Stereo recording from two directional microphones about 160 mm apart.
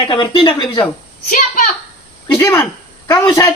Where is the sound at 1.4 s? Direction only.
55° left (ahead or behind).